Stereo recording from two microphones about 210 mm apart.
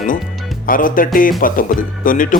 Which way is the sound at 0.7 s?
40° left (ahead or behind).